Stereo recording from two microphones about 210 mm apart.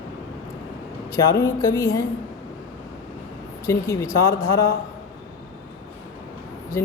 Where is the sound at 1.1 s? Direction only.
15° left (ahead or behind).